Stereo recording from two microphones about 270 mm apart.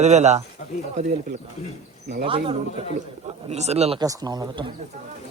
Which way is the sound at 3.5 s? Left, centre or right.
Right.